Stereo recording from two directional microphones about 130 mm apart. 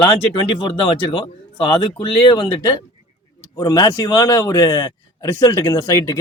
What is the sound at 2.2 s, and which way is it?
A man's voice, 35° left (ahead or behind).